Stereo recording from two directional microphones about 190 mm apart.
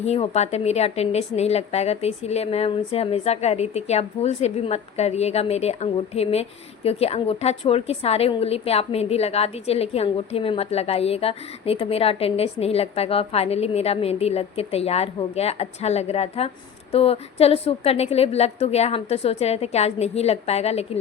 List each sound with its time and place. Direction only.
0.0 s a woman's voice: 35° left (ahead or behind)